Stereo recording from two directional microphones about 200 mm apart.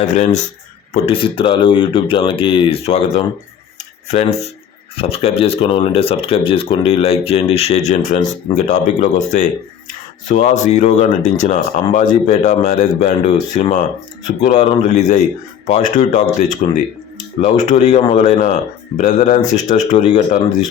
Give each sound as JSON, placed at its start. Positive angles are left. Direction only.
{"t": 0.2, "sound": "speech", "side_deg": 35}